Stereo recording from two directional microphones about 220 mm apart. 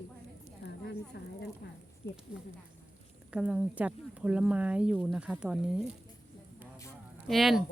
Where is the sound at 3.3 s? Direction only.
5° right (ahead or behind).